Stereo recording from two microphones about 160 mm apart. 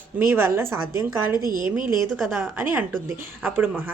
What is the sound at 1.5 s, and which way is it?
Speech, 60° right (ahead or behind).